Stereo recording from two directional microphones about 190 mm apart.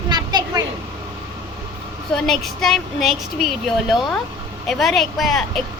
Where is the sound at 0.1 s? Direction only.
20° right (ahead or behind).